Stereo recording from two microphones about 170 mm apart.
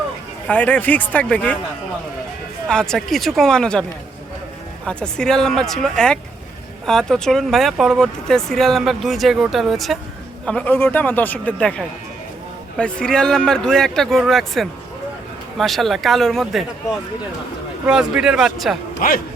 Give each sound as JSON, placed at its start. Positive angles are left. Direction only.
{"t": 0.4, "sound": "speech", "side_deg": 10}
{"t": 2.6, "sound": "speech", "side_deg": 5}
{"t": 4.9, "sound": "speech", "side_deg": 5}
{"t": 17.8, "sound": "speech", "side_deg": -5}
{"t": 18.9, "sound": "a man's voice", "side_deg": 55}